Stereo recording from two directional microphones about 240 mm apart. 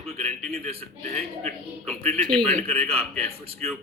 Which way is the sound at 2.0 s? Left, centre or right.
Right.